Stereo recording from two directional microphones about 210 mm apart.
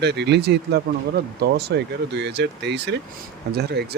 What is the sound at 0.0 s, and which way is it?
Speech, 50° right (ahead or behind).